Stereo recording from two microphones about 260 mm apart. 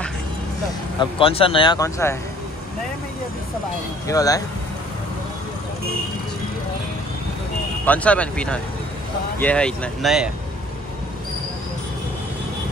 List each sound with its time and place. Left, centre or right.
1.2 s speech: left
4.1 s speech: centre
7.8 s speech: centre